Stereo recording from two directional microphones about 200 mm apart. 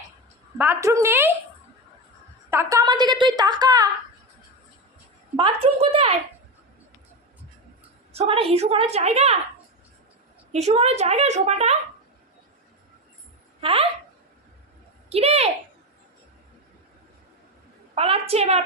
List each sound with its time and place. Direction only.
0.6 s a woman's voice: 15° right (ahead or behind)
2.5 s a sound: 15° right (ahead or behind)
5.4 s speech: 25° right (ahead or behind)
8.1 s a woman's voice: 30° right (ahead or behind)
10.5 s a woman's voice: 35° right (ahead or behind)
13.6 s speech: 30° right (ahead or behind)
15.1 s a woman's voice: 30° right (ahead or behind)
17.9 s a woman's voice: 30° right (ahead or behind)